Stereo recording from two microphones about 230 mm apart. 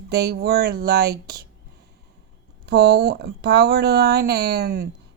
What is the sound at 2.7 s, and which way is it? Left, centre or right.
Speech, right.